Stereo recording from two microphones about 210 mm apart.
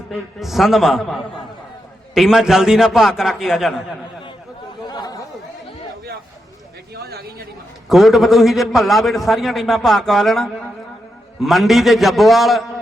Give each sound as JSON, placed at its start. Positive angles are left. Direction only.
{"t": 0.1, "sound": "a man's voice", "side_deg": 0}
{"t": 4.9, "sound": "chatter", "side_deg": 20}
{"t": 6.9, "sound": "a sound", "side_deg": -50}
{"t": 7.9, "sound": "a man's voice", "side_deg": 0}